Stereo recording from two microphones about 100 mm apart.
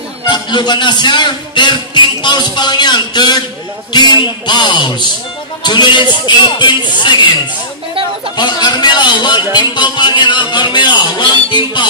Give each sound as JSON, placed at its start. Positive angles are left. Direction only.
{"t": 0.3, "sound": "speech", "side_deg": 50}
{"t": 8.4, "sound": "speech", "side_deg": 45}